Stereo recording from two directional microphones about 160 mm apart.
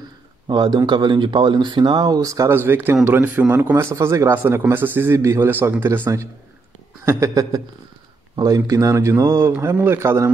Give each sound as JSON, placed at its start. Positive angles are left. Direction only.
{"t": 0.5, "sound": "speech", "side_deg": -30}